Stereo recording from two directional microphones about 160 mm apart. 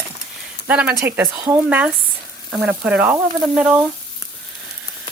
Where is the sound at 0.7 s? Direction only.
10° right (ahead or behind).